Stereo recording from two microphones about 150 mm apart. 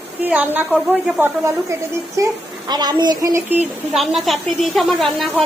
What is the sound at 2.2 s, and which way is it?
A woman's voice, 25° right (ahead or behind).